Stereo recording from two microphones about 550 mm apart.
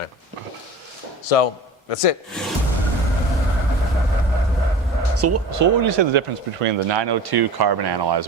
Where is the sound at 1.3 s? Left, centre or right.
Left.